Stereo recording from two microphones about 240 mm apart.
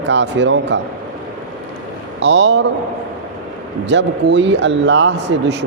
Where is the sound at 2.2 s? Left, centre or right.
Right.